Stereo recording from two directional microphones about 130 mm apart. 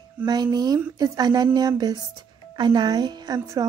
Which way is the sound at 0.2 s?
30° right (ahead or behind).